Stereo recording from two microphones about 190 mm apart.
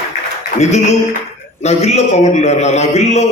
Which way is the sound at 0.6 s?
35° left (ahead or behind).